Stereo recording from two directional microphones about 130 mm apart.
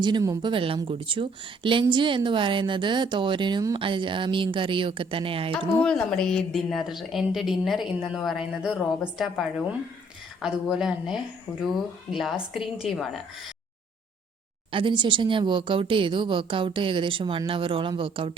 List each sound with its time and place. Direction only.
0.0 s a woman's voice: 30° right (ahead or behind)
0.5 s a woman's voice: 45° right (ahead or behind)
5.8 s a woman's voice: 5° left (ahead or behind)
14.7 s a woman's voice: 40° right (ahead or behind)